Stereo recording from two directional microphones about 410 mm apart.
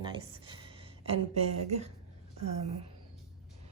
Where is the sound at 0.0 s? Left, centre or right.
Centre.